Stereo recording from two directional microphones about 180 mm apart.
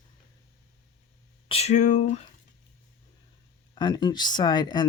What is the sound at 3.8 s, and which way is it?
Speech, 25° left (ahead or behind).